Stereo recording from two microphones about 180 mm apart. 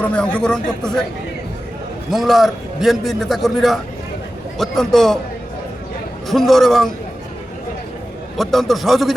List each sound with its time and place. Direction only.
0.0 s a man's voice: 5° left (ahead or behind)
2.0 s a man's voice: centre (ahead or behind)
6.2 s a man's voice: centre (ahead or behind)
8.4 s a man's voice: centre (ahead or behind)